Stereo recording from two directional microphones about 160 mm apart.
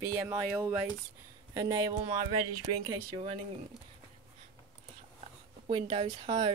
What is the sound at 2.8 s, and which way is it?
Speech, 30° right (ahead or behind).